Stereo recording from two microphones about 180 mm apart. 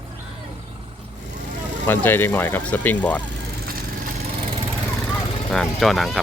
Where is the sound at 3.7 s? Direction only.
55° right (ahead or behind).